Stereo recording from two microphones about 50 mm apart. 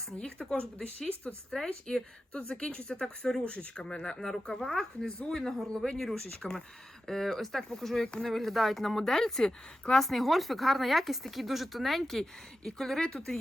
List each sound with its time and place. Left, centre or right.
0.2 s speech: centre
3.4 s speech: left